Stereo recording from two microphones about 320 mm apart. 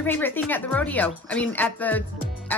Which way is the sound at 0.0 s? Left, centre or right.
Centre.